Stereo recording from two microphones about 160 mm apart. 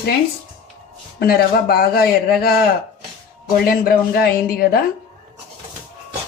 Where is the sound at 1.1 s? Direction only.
75° left (ahead or behind).